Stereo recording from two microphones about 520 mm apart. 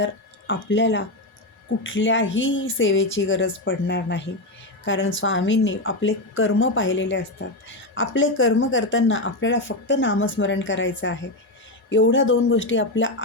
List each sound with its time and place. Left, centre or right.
0.0 s speech: left